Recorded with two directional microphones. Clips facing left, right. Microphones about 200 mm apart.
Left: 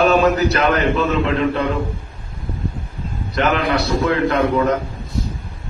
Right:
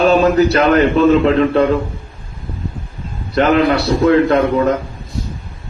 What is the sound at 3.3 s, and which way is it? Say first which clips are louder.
Speech: right 6 dB; 35° right (ahead or behind).